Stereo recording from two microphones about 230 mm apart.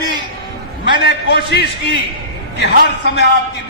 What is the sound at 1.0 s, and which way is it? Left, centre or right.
A man's voice, left.